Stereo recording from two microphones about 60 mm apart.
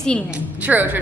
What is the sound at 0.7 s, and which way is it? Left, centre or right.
Speech, right.